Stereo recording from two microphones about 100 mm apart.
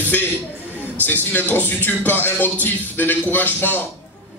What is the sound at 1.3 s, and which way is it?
Speech, 20° left (ahead or behind).